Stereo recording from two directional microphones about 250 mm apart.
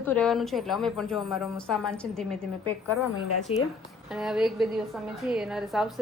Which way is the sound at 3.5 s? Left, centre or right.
Left.